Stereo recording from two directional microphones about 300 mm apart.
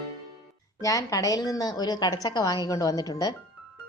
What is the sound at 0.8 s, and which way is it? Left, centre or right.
A woman's voice, centre.